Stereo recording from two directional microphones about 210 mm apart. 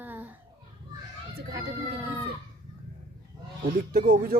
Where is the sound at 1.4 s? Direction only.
45° right (ahead or behind).